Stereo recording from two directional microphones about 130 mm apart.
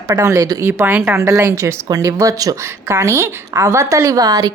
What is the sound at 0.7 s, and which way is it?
Speech, 15° right (ahead or behind).